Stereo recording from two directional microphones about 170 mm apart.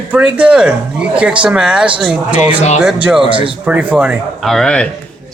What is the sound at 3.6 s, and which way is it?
A man's voice, 10° right (ahead or behind).